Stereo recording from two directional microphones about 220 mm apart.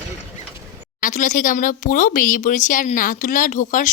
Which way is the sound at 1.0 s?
35° left (ahead or behind).